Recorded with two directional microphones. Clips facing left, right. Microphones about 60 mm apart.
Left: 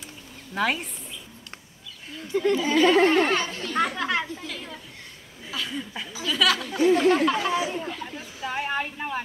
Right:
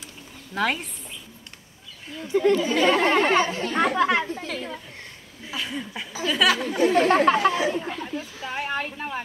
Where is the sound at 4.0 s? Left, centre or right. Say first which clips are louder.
Right 5 dB; centre.